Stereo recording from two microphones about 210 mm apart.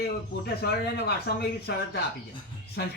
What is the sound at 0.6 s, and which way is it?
Speech, 50° left (ahead or behind).